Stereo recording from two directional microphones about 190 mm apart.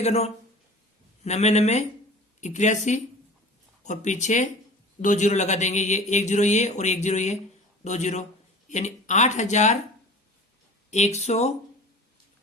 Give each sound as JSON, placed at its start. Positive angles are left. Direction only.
{"t": 0.0, "sound": "a man's voice", "side_deg": 35}
{"t": 10.9, "sound": "a man's voice", "side_deg": 35}